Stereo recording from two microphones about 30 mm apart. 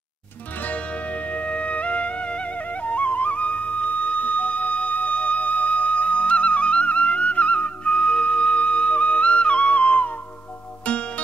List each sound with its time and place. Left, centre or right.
0.7 s music: left
2.5 s music: left